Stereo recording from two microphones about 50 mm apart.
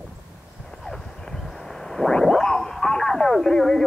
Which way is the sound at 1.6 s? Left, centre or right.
Centre.